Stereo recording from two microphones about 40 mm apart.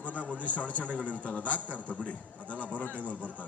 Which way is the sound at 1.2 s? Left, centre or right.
Left.